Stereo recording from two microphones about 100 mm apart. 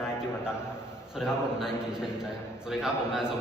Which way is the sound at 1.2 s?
5° right (ahead or behind).